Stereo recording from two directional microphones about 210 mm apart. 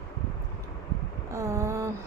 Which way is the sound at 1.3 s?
15° right (ahead or behind).